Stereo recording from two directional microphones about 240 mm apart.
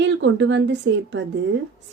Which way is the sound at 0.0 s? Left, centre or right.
Right.